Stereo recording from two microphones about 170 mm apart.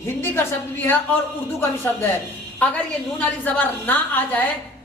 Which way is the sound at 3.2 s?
10° left (ahead or behind).